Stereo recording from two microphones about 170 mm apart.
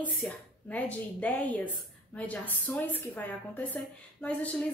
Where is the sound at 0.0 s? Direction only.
10° left (ahead or behind).